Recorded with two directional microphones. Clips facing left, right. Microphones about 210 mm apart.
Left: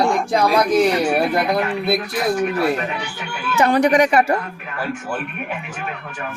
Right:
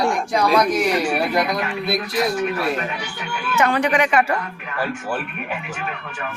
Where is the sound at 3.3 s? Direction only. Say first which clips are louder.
Left 3 dB; 35° left (ahead or behind).